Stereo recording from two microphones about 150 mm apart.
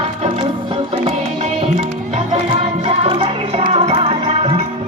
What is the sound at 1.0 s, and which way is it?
Music, 45° right (ahead or behind).